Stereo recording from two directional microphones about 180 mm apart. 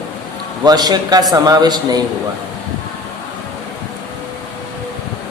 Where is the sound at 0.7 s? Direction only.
20° right (ahead or behind).